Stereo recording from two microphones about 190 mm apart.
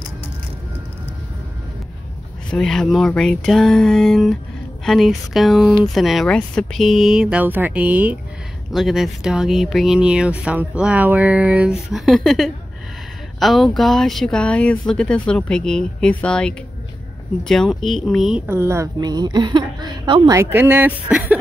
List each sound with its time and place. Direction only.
2.5 s speech: 5° left (ahead or behind)
18.5 s a woman's voice: 15° right (ahead or behind)
20.3 s speech: 10° right (ahead or behind)